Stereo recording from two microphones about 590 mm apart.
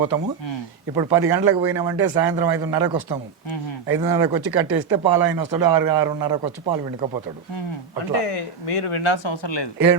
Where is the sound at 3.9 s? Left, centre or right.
Centre.